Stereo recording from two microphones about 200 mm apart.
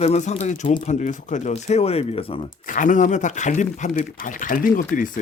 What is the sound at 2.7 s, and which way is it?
Speech, 40° left (ahead or behind).